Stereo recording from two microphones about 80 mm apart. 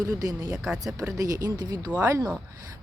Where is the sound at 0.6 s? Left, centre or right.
Centre.